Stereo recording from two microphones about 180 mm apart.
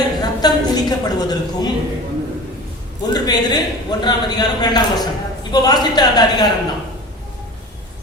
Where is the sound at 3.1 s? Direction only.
25° left (ahead or behind).